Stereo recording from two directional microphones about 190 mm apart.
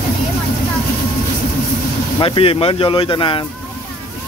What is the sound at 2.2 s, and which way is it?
Speech, 30° left (ahead or behind).